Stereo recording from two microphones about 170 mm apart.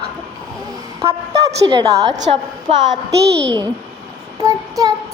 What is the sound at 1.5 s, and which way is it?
Speech, 30° right (ahead or behind).